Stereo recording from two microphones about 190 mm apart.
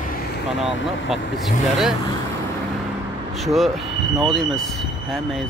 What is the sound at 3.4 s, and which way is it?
Speech, centre (ahead or behind).